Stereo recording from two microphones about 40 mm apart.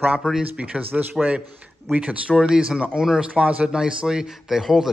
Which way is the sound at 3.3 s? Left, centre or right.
Right.